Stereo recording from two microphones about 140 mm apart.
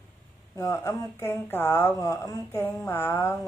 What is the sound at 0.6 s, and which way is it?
Speech, 20° left (ahead or behind).